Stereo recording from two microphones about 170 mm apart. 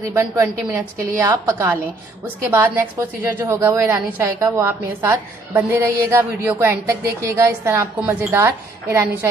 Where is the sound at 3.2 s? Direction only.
15° right (ahead or behind).